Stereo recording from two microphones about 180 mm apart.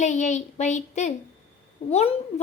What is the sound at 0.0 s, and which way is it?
Female singing, 40° left (ahead or behind).